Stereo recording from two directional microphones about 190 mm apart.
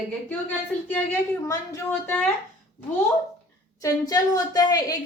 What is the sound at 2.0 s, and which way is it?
Speech, 10° left (ahead or behind).